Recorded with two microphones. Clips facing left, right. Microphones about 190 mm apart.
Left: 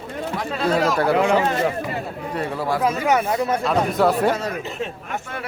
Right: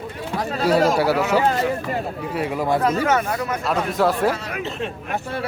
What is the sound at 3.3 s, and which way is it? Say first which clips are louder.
Speech: left 4 dB; 25° left (ahead or behind).